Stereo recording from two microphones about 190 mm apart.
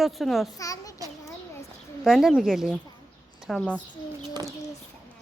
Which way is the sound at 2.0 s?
Centre (ahead or behind).